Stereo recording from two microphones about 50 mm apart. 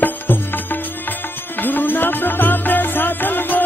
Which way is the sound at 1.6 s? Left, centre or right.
Left.